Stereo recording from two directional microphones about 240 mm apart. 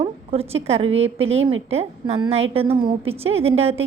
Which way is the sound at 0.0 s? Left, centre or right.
Right.